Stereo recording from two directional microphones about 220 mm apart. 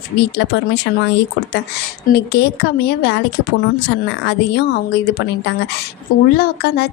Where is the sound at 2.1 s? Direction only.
45° left (ahead or behind).